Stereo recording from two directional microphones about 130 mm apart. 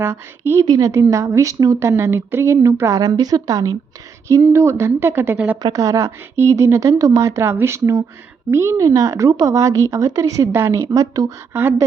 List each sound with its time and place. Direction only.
0.0 s a woman's voice: 20° right (ahead or behind)